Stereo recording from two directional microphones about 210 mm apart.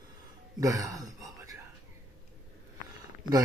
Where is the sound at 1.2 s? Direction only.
15° right (ahead or behind).